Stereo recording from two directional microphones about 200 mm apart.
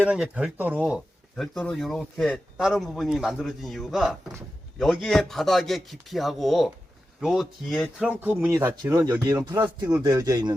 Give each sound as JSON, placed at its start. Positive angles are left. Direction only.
{"t": 0.0, "sound": "speech", "side_deg": -5}